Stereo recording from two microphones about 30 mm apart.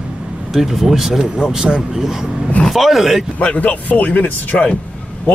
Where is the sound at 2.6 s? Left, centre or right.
Centre.